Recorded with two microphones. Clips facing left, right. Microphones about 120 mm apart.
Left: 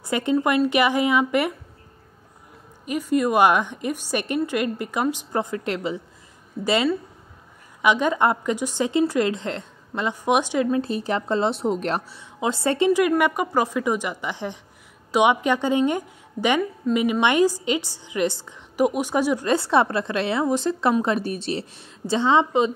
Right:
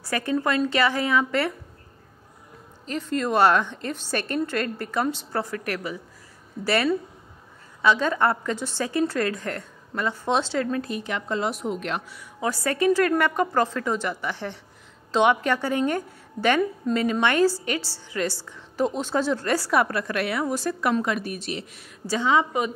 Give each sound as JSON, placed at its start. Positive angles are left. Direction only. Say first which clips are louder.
{"t": 0.0, "sound": "a woman's voice", "louder": "left 3 dB", "side_deg": 20}
{"t": 2.8, "sound": "a woman's voice", "louder": "left 5 dB", "side_deg": 10}
{"t": 10.8, "sound": "a woman's voice", "louder": "left 5 dB", "side_deg": 30}
{"t": 12.2, "sound": "a woman's voice", "louder": "left 2 dB", "side_deg": 25}